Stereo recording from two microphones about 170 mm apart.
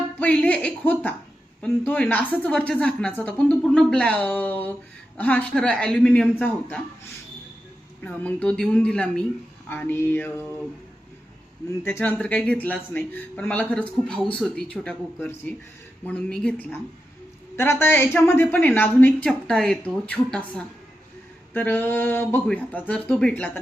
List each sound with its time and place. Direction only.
0.2 s speech: 10° left (ahead or behind)
8.0 s speech: 10° left (ahead or behind)
11.9 s speech: 5° left (ahead or behind)